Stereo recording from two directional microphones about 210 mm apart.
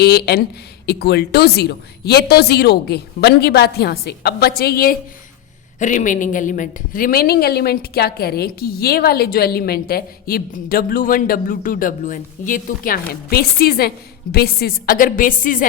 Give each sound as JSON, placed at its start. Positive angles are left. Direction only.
{"t": 0.0, "sound": "a woman's voice", "side_deg": 50}